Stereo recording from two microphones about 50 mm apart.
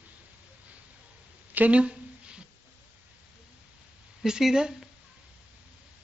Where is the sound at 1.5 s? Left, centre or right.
Right.